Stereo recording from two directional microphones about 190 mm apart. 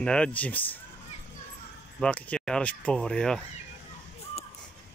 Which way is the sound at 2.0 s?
5° left (ahead or behind).